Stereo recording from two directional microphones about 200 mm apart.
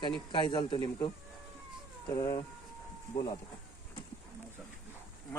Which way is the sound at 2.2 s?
20° left (ahead or behind).